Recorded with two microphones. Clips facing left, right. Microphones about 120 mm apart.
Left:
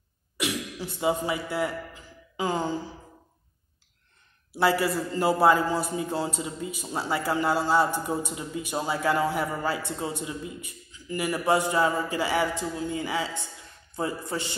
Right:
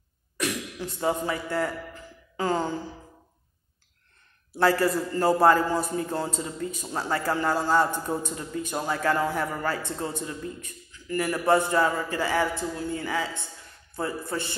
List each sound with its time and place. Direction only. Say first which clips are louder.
0.4 s throat clearing: even; 5° left (ahead or behind)
0.9 s a man's voice: left 1 dB; 10° left (ahead or behind)
2.3 s a sound: right 1 dB; 15° left (ahead or behind)
4.6 s a man's voice: right 1 dB; 10° left (ahead or behind)